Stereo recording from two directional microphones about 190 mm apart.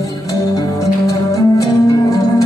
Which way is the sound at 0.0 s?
20° left (ahead or behind).